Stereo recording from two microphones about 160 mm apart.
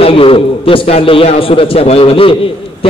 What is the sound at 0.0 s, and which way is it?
A man's voice, 35° left (ahead or behind).